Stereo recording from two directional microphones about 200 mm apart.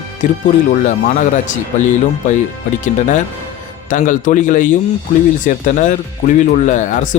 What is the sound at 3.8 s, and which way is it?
Speech, 40° left (ahead or behind).